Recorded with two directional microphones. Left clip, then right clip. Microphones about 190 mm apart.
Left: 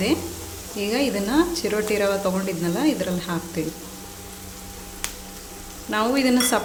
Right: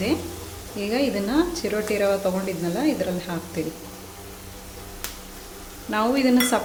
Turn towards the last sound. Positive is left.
turn(degrees=5)  # may be behind; listen again after turning